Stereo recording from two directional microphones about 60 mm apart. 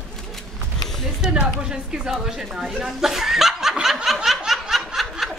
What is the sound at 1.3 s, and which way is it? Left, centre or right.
Speech, centre.